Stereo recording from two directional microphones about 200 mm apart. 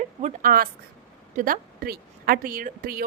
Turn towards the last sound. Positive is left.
turn(degrees=-45)  # may be behind; listen again after turning